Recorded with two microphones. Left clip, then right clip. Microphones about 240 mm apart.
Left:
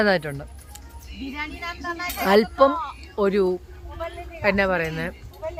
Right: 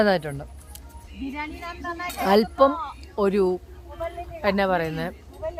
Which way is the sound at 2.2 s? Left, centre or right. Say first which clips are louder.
Left 1 dB; centre.